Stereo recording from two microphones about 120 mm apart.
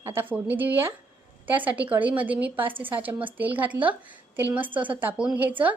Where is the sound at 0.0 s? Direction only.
20° right (ahead or behind).